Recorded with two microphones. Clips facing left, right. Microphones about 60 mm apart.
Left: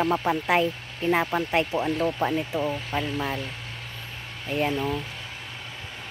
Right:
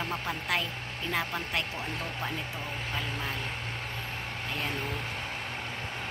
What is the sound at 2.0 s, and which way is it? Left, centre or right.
Speech, left.